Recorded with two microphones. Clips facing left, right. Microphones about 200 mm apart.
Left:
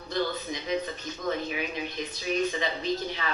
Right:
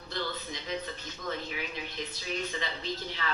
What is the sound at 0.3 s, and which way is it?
A woman's voice, 15° left (ahead or behind).